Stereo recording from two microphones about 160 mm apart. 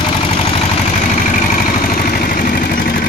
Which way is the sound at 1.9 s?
65° left (ahead or behind).